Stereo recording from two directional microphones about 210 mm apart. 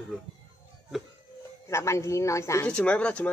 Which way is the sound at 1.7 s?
15° left (ahead or behind).